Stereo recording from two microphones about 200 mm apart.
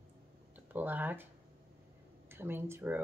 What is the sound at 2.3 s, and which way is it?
Speech, 10° right (ahead or behind).